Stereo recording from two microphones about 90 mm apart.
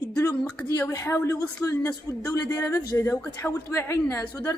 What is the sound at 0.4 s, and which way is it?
Speech, 10° left (ahead or behind).